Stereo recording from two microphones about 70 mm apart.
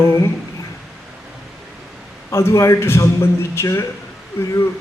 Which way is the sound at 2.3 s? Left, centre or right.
Left.